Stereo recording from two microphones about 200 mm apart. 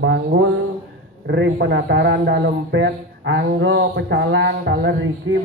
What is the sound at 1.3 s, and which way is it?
A man's voice, 65° right (ahead or behind).